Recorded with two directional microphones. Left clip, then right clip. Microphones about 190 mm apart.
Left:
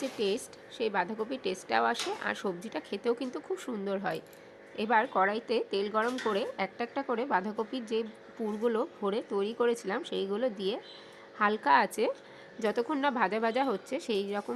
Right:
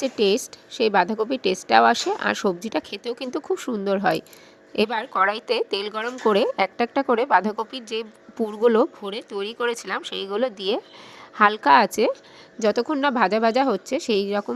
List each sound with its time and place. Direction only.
0.0 s a woman's voice: 40° right (ahead or behind)
4.9 s a woman's voice: 50° right (ahead or behind); by 14.5 s 35° right (ahead or behind)